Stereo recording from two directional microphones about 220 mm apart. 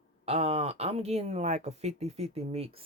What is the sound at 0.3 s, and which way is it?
Speech, 25° right (ahead or behind).